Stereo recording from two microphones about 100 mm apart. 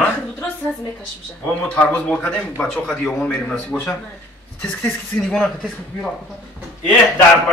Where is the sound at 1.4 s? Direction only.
15° left (ahead or behind).